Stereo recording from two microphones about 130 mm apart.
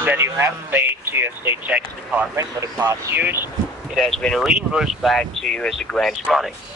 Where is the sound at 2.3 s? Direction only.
25° right (ahead or behind).